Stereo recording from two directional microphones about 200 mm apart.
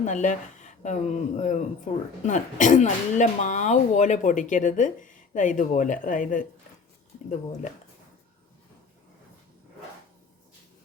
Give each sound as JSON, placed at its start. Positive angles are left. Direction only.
{"t": 0.0, "sound": "a woman's voice", "side_deg": 40}